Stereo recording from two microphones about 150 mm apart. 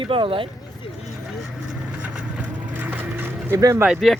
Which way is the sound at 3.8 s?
5° right (ahead or behind).